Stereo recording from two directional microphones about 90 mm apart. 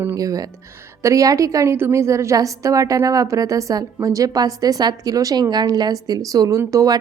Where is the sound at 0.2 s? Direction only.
40° right (ahead or behind).